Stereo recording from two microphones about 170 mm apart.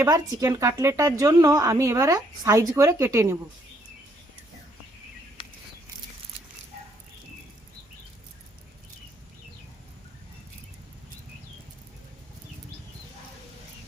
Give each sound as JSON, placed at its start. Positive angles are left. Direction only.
{"t": 0.0, "sound": "a woman's voice", "side_deg": -20}